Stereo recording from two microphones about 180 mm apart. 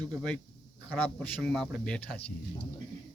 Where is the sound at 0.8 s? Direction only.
10° left (ahead or behind).